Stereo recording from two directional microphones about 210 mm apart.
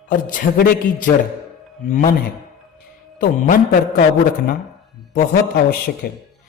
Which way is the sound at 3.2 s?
40° left (ahead or behind).